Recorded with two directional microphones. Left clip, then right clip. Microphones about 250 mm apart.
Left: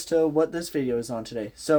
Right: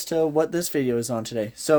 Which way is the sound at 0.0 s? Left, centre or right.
Right.